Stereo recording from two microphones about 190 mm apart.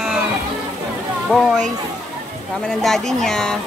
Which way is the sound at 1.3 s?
5° right (ahead or behind).